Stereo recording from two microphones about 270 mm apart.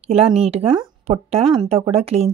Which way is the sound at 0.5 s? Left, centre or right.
Right.